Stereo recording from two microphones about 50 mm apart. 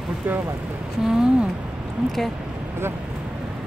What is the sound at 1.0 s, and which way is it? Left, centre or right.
Speech, centre.